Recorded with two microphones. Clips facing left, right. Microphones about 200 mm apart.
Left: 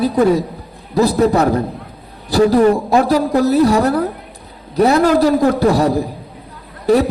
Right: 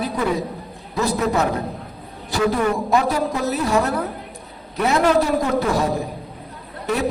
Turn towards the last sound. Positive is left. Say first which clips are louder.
# left 10 dB
turn(degrees=35)  # may be behind; listen again after turning